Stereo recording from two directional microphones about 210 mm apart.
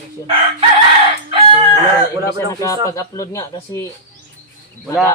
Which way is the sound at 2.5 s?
15° left (ahead or behind).